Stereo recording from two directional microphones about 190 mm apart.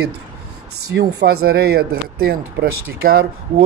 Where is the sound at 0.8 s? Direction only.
55° right (ahead or behind).